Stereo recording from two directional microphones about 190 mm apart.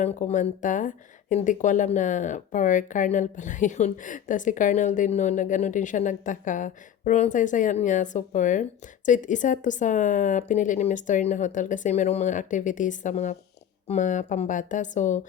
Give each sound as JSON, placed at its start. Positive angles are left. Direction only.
{"t": 0.0, "sound": "speech", "side_deg": 40}